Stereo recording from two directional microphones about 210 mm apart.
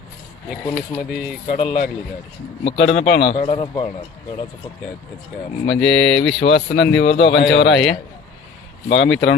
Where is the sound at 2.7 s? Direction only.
60° left (ahead or behind).